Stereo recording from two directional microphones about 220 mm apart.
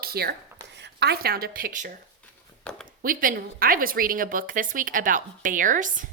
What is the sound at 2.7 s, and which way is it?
Speech, 5° left (ahead or behind).